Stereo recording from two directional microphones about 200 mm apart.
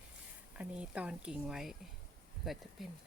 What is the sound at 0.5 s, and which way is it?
Speech, 5° right (ahead or behind).